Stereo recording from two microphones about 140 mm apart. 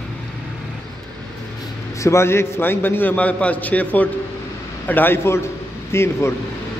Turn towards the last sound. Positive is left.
turn(degrees=20)  # may be behind; listen again after turning